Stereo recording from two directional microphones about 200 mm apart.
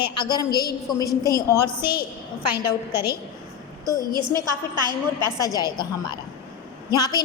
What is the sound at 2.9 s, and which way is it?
Speech, 50° left (ahead or behind).